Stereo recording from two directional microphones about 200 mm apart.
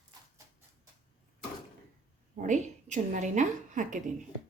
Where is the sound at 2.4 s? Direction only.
40° right (ahead or behind).